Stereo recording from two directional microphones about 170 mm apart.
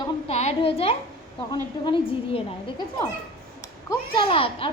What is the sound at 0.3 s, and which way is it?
A woman's voice, 40° left (ahead or behind).